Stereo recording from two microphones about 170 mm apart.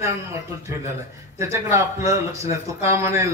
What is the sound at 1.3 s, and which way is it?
A man's voice, 20° right (ahead or behind).